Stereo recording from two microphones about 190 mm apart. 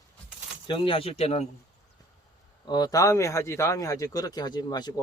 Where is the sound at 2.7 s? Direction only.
20° left (ahead or behind).